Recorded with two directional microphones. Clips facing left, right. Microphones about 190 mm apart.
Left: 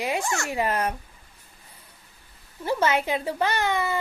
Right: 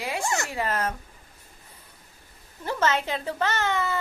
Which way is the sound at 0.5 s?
15° left (ahead or behind).